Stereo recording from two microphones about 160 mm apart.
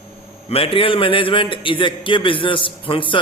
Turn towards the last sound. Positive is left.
turn(degrees=30)  # may be behind; listen again after turning